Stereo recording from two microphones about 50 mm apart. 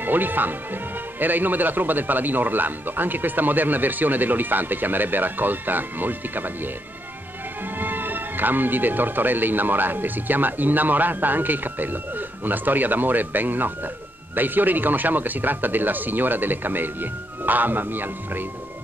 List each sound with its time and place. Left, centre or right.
0.0 s speech: right
7.8 s speech: right